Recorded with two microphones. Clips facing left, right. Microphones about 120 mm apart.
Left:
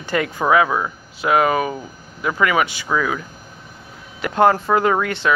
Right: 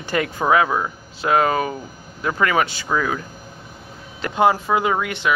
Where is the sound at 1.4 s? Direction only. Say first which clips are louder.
Left 2 dB; 20° left (ahead or behind).